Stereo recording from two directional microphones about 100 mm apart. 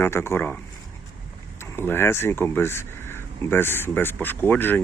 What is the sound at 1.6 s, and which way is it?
Speech, 25° left (ahead or behind).